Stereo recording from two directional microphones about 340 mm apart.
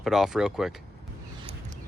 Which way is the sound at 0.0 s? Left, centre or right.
Centre.